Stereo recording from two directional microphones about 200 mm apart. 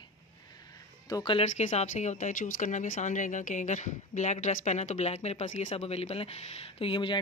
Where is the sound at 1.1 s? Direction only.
20° left (ahead or behind).